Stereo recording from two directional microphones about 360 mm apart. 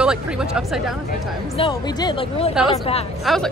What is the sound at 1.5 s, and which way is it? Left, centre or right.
Speech, centre.